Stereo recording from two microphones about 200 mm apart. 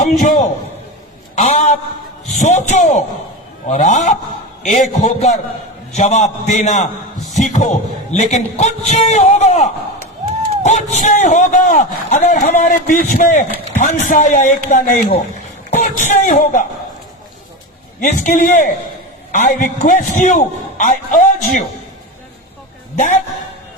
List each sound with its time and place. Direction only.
0.0 s a man's voice: 40° left (ahead or behind)
18.0 s a man's voice: 40° left (ahead or behind)